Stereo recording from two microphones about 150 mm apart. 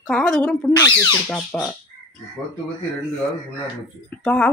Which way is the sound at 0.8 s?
25° left (ahead or behind).